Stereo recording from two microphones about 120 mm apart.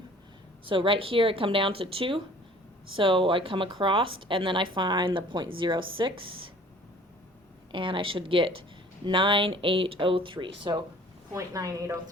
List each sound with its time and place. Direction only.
0.6 s speech: 45° right (ahead or behind)
7.7 s speech: 45° right (ahead or behind)
11.3 s a woman's voice: 30° right (ahead or behind)